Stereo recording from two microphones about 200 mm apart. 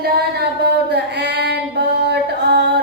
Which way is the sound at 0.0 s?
55° right (ahead or behind).